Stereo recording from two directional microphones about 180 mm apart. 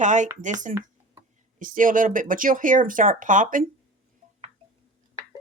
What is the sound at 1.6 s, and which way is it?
Speech, 50° right (ahead or behind).